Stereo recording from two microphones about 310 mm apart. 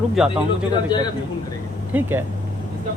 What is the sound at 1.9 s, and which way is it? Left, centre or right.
Speech, centre.